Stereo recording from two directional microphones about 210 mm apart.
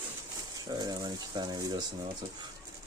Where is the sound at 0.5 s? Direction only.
20° right (ahead or behind).